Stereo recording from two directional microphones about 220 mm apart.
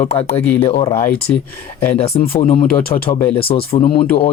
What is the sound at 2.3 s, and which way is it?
Speech, 30° left (ahead or behind).